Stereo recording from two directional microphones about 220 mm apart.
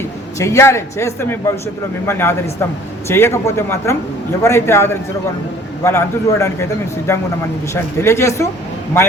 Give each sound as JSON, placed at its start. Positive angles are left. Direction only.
{"t": 0.3, "sound": "a man's voice", "side_deg": 15}